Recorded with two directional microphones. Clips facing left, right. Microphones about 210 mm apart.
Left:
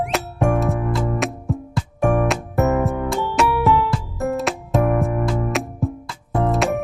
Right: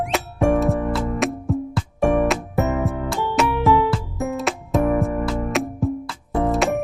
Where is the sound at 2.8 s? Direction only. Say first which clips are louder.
Left 2 dB; centre (ahead or behind).